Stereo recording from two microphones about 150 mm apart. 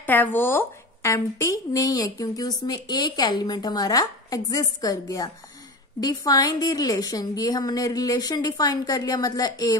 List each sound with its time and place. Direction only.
0.0 s a woman's voice: 15° left (ahead or behind)